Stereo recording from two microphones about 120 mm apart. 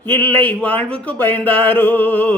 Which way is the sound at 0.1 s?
15° left (ahead or behind).